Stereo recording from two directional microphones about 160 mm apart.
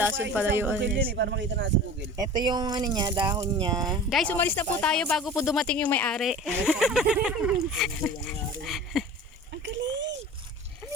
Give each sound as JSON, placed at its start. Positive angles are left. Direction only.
{"t": 0.0, "sound": "speech", "side_deg": -10}
{"t": 1.1, "sound": "speech", "side_deg": -90}
{"t": 2.1, "sound": "speech", "side_deg": -25}
{"t": 4.1, "sound": "speech", "side_deg": 5}
{"t": 9.6, "sound": "a sound", "side_deg": -90}